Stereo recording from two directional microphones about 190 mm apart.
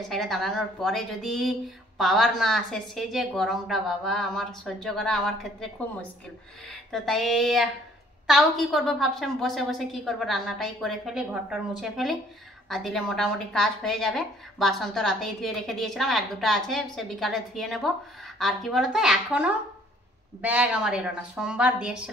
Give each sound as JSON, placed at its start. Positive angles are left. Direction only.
{"t": 0.1, "sound": "a woman's voice", "side_deg": 0}
{"t": 6.7, "sound": "a woman's voice", "side_deg": 0}